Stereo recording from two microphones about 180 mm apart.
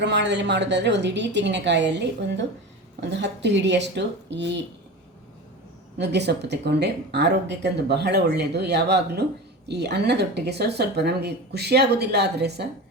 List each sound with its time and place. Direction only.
0.0 s speech: 75° right (ahead or behind)
6.0 s speech: 70° right (ahead or behind)